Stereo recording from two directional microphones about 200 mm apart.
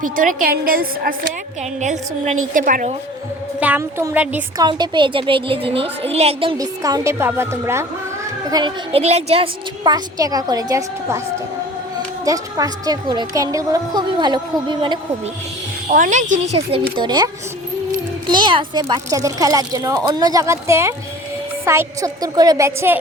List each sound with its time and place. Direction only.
0.2 s a woman's voice: 40° right (ahead or behind)
3.6 s a woman's voice: 10° right (ahead or behind)
4.5 s a woman's voice: 20° right (ahead or behind)
12.2 s a woman's voice: 15° right (ahead or behind)
15.9 s speech: 40° right (ahead or behind)
17.0 s a woman's voice: 20° right (ahead or behind)
18.3 s a woman's voice: 25° right (ahead or behind)